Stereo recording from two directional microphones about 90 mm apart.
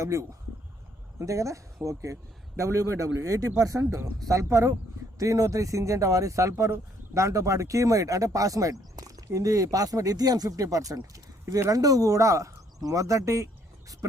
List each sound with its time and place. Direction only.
0.0 s speech: 35° right (ahead or behind)